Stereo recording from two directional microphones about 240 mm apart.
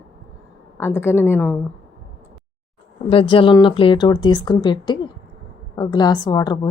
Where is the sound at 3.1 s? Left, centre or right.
Left.